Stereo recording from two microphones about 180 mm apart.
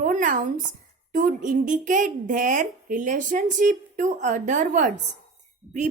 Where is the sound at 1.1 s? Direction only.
45° right (ahead or behind).